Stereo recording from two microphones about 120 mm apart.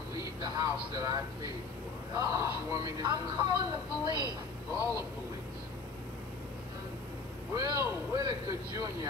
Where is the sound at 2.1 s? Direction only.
30° right (ahead or behind).